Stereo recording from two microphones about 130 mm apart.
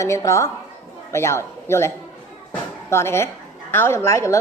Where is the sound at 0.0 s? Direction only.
25° left (ahead or behind).